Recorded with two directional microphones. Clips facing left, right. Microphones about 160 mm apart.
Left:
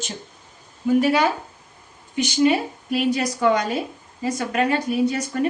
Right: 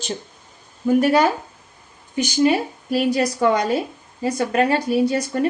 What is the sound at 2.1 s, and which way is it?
A woman's voice, 40° right (ahead or behind).